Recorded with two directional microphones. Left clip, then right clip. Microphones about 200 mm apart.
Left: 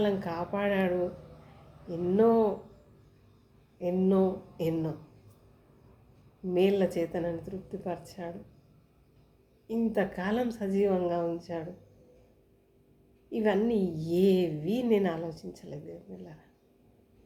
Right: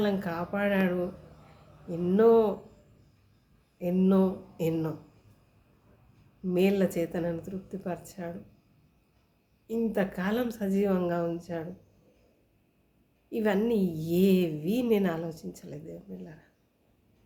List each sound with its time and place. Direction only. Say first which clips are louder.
0.0 s a woman's voice: even; 15° right (ahead or behind)
3.8 s a woman's voice: even; 20° right (ahead or behind)
6.5 s a woman's voice: even; 20° right (ahead or behind)
9.6 s a woman's voice: even; 15° right (ahead or behind)
13.3 s a woman's voice: even; 20° right (ahead or behind)